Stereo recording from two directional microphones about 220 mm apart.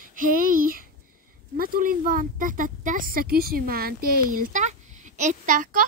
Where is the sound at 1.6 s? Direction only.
40° right (ahead or behind).